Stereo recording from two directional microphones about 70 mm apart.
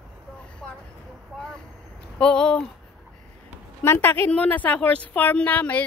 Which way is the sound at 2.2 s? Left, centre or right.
Centre.